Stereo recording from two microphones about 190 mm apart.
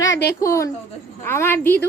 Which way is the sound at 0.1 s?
60° left (ahead or behind).